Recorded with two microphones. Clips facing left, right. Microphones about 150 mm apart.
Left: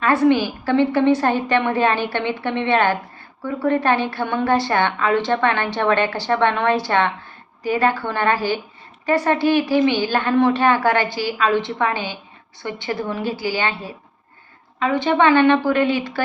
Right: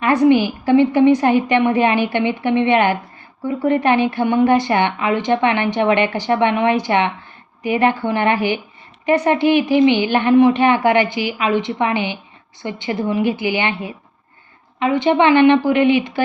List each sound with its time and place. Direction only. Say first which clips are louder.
0.0 s a woman's voice: right 3 dB; 15° right (ahead or behind)